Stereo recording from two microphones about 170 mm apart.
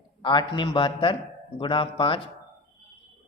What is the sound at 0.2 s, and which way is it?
A man's voice, 25° left (ahead or behind).